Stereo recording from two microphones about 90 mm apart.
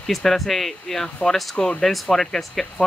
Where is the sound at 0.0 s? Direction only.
5° left (ahead or behind).